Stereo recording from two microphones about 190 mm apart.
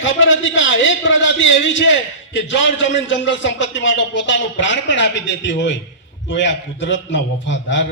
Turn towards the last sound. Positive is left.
turn(degrees=75)  # may be behind; listen again after turning